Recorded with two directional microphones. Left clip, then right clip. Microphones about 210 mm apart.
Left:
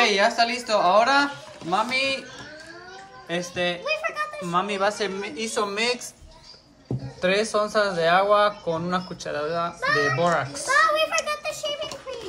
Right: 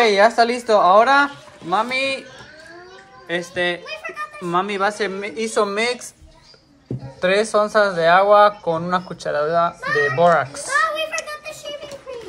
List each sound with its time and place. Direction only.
0.0 s speech: 5° left (ahead or behind)
3.3 s speech: 15° left (ahead or behind)
3.8 s a sound: centre (ahead or behind)
4.5 s speech: 10° left (ahead or behind)
7.2 s speech: 5° left (ahead or behind)